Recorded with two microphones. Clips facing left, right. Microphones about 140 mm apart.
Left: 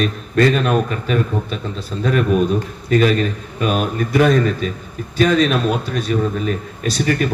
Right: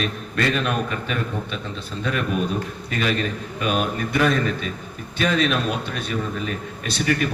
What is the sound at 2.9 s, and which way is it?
A man's voice, 40° left (ahead or behind).